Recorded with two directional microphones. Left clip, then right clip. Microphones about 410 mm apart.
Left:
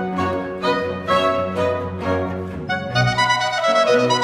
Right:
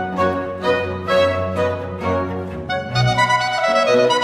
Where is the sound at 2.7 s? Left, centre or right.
Centre.